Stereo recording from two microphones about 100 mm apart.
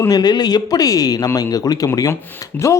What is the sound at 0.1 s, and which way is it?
Speech, 45° left (ahead or behind).